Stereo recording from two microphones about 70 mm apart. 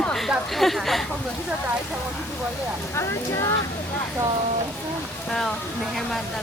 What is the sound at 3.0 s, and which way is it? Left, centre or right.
Speech, left.